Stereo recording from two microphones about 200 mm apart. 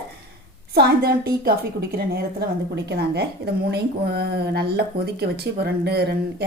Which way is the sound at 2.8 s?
55° right (ahead or behind).